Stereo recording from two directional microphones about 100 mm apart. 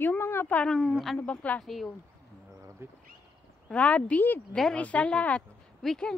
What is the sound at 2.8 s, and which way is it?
Speech, 25° right (ahead or behind).